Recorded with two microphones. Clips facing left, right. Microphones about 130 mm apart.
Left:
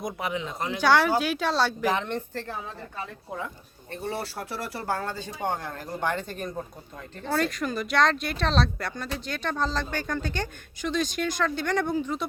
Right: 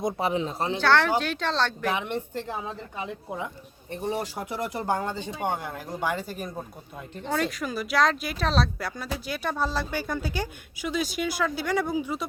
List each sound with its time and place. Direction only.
0.0 s speech: 30° right (ahead or behind)
0.8 s speech: 10° left (ahead or behind)
1.9 s speech: 15° right (ahead or behind)